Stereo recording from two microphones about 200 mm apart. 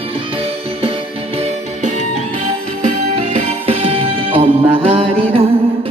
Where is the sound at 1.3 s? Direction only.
35° right (ahead or behind).